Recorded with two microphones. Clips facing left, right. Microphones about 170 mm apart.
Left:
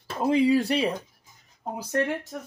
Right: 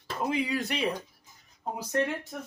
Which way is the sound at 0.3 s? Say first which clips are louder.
Left 10 dB; 30° left (ahead or behind).